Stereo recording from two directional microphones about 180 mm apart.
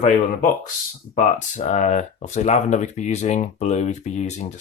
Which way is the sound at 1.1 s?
45° left (ahead or behind).